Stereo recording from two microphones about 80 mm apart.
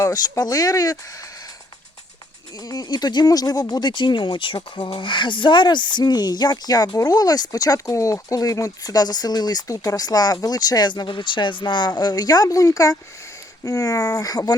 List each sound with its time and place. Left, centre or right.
0.0 s speech: left
2.6 s speech: left